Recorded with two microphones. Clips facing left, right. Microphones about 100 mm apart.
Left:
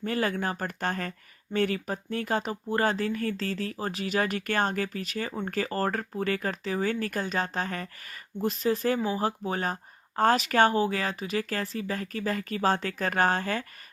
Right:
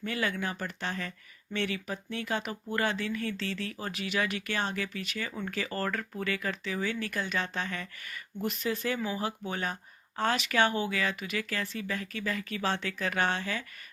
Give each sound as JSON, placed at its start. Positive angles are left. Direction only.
{"t": 0.0, "sound": "speech", "side_deg": 40}